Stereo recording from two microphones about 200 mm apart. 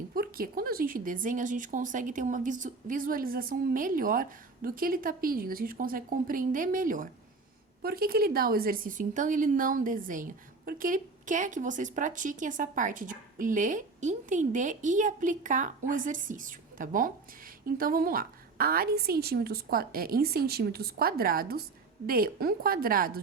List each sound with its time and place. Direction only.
0.1 s speech: 45° right (ahead or behind)